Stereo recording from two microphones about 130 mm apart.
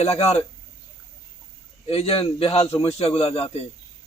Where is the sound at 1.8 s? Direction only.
50° left (ahead or behind).